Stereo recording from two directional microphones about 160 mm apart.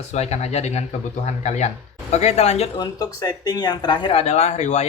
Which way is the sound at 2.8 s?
25° left (ahead or behind).